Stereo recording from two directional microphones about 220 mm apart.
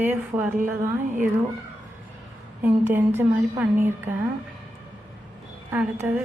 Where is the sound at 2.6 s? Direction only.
10° right (ahead or behind).